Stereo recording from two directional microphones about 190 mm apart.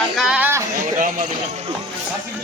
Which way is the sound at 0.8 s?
45° right (ahead or behind).